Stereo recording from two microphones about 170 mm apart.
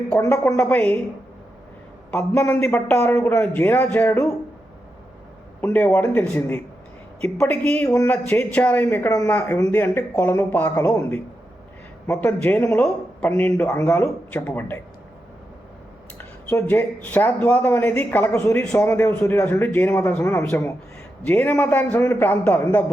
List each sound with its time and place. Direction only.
0.2 s speech: 15° left (ahead or behind)
2.1 s speech: 15° left (ahead or behind)
5.5 s speech: 10° left (ahead or behind)
16.1 s speech: 10° left (ahead or behind)